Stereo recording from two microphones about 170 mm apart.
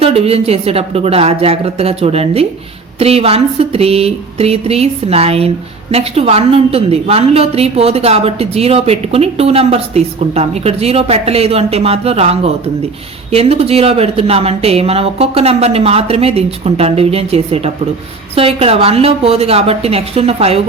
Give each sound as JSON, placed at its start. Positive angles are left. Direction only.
{"t": 0.0, "sound": "a woman's voice", "side_deg": -35}